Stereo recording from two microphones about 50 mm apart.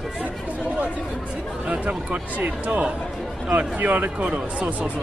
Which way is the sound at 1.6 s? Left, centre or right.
Right.